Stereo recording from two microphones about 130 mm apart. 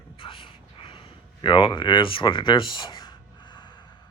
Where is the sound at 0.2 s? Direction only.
40° left (ahead or behind).